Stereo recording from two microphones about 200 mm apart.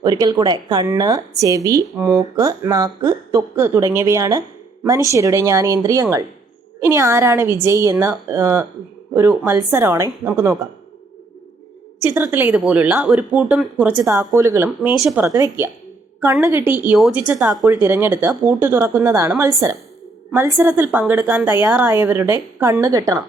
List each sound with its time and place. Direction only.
0.0 s a woman's voice: 20° right (ahead or behind)
11.9 s speech: 10° right (ahead or behind)